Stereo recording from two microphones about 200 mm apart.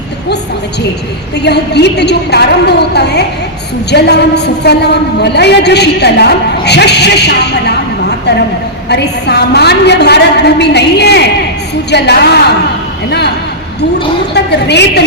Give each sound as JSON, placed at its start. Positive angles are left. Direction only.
{"t": 1.4, "sound": "a woman's voice", "side_deg": 55}
{"t": 8.9, "sound": "a woman's voice", "side_deg": 55}
{"t": 13.1, "sound": "a sound", "side_deg": 55}
{"t": 14.3, "sound": "a woman's voice", "side_deg": 55}